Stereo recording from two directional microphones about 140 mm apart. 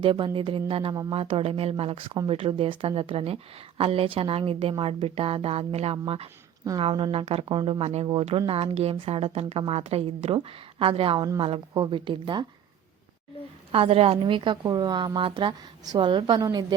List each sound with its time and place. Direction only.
0.0 s a woman's voice: 40° right (ahead or behind)
13.7 s a woman's voice: 40° right (ahead or behind)